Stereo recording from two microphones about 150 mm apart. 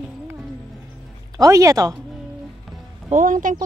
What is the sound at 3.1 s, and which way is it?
Speech, 60° right (ahead or behind).